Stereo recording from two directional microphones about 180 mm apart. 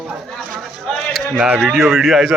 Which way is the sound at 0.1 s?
Centre (ahead or behind).